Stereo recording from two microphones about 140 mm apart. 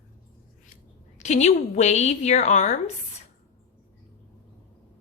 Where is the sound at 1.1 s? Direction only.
55° left (ahead or behind).